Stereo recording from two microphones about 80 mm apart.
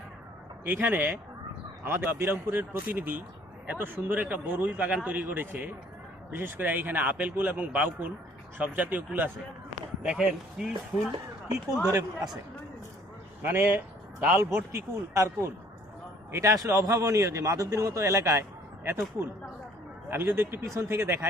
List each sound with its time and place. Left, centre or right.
0.6 s a man's voice: right
11.9 s speech: right
13.4 s a man's voice: right
14.7 s a man's voice: right
16.3 s a man's voice: right
18.9 s a man's voice: right